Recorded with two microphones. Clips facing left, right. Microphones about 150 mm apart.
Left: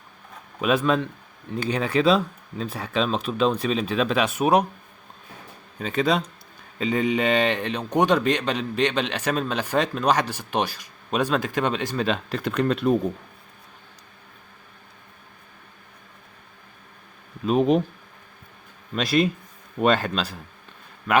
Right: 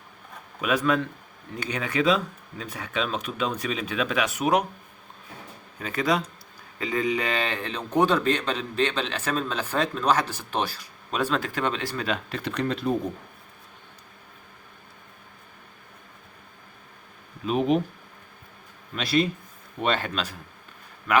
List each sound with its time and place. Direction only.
0.6 s speech: 25° left (ahead or behind)
5.8 s speech: 25° left (ahead or behind)
12.3 s speech: 50° left (ahead or behind)
17.4 s speech: 40° left (ahead or behind)
18.9 s speech: 45° left (ahead or behind)